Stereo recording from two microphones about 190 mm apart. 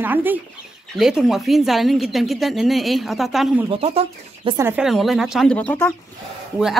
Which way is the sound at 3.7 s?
30° right (ahead or behind).